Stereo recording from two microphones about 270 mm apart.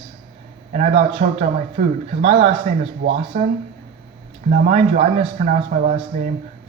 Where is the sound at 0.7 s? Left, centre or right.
Right.